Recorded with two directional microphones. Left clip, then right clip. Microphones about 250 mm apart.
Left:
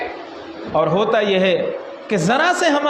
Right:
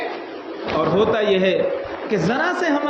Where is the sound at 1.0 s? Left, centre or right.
Left.